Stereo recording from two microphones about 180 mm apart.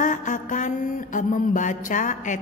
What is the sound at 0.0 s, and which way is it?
Mantra, 45° left (ahead or behind).